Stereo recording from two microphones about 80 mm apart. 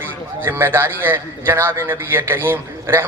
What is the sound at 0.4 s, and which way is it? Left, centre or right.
A man's voice, right.